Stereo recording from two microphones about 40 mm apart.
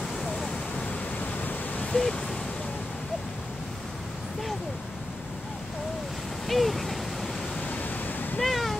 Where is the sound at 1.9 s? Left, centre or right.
Centre.